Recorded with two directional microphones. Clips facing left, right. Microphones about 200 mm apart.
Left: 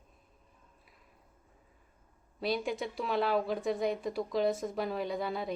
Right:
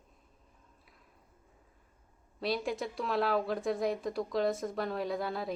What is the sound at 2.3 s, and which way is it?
Speech, centre (ahead or behind).